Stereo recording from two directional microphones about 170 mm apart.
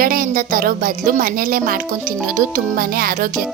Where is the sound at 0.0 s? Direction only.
55° right (ahead or behind).